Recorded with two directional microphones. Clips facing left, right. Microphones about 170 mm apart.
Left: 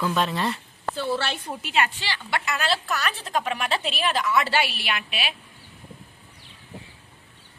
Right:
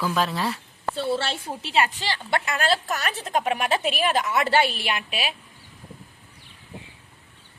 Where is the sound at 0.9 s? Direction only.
30° right (ahead or behind); by 3.2 s 45° right (ahead or behind).